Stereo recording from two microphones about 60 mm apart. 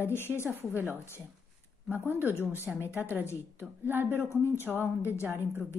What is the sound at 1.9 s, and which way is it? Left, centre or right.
A woman's voice, right.